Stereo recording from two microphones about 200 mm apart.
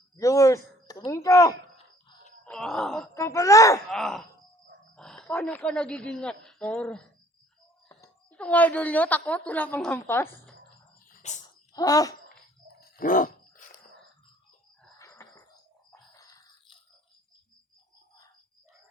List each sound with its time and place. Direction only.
0.2 s a sound: 15° left (ahead or behind)
2.4 s groan: 5° left (ahead or behind)
3.2 s speech: 15° left (ahead or behind)
3.8 s a woman's voice: centre (ahead or behind)
11.2 s dog: 35° left (ahead or behind)
11.7 s speech: 15° left (ahead or behind)
12.8 s dog: 45° left (ahead or behind)
14.9 s a sound: 15° left (ahead or behind)